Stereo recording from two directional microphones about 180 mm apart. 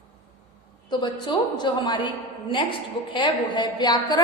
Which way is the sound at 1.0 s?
25° left (ahead or behind).